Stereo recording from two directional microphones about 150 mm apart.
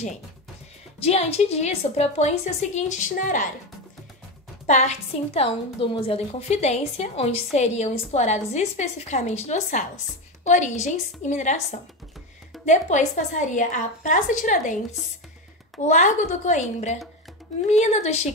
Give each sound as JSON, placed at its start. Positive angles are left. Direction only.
{"t": 1.0, "sound": "a woman's voice", "side_deg": 45}
{"t": 4.6, "sound": "a woman's voice", "side_deg": 50}
{"t": 15.8, "sound": "a woman's voice", "side_deg": 55}